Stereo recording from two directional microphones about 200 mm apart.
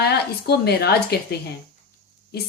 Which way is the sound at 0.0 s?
55° left (ahead or behind).